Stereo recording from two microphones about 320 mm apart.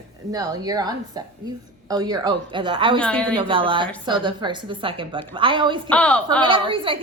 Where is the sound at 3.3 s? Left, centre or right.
Centre.